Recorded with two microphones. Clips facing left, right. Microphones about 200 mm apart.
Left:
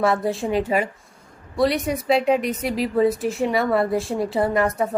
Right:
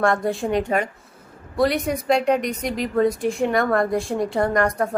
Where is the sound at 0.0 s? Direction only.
5° left (ahead or behind).